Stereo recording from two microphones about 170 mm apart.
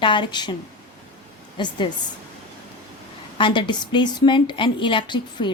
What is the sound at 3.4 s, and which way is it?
A woman's voice, 30° left (ahead or behind).